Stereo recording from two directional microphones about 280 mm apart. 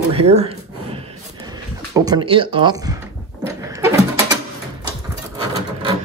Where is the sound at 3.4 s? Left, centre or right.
Centre.